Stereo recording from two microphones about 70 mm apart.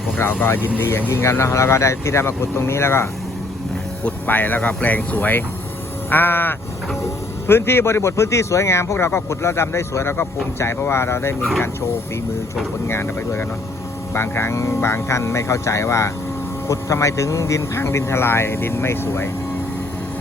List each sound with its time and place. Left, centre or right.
0.2 s a man's voice: left
4.0 s a man's voice: left
12.9 s a man's voice: left